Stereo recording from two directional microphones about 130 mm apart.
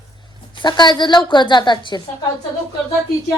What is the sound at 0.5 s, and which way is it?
A woman's voice, 35° left (ahead or behind).